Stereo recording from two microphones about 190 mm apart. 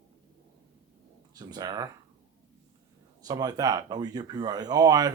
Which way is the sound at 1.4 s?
20° right (ahead or behind).